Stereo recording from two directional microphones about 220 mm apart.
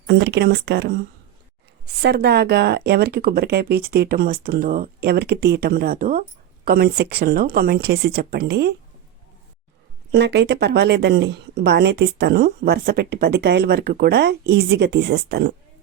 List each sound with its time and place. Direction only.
0.1 s speech: 50° right (ahead or behind)
10.1 s speech: 50° right (ahead or behind)